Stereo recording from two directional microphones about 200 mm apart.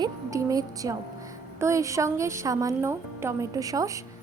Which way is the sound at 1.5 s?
15° right (ahead or behind).